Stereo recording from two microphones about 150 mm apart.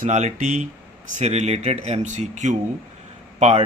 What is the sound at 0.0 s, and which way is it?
Speech, 55° right (ahead or behind).